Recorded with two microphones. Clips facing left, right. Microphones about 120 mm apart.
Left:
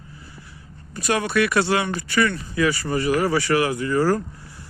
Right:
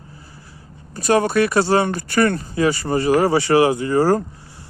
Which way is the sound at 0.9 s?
35° right (ahead or behind).